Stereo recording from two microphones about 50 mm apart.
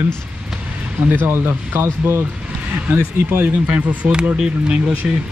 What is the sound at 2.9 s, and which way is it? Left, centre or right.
Speech, right.